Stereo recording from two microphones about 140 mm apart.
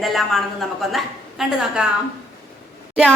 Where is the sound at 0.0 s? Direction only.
Centre (ahead or behind).